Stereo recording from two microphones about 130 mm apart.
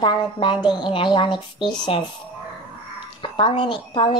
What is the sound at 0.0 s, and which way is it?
Speech, 35° left (ahead or behind).